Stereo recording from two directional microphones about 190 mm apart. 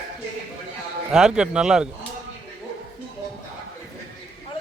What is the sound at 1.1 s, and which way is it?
Speech, 5° right (ahead or behind).